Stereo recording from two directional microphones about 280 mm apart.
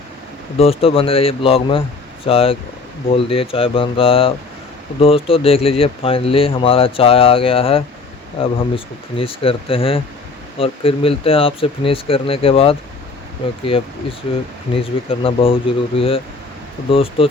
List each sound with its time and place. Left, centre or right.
0.6 s speech: left